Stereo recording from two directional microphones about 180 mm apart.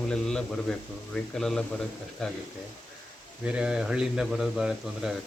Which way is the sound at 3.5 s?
5° right (ahead or behind).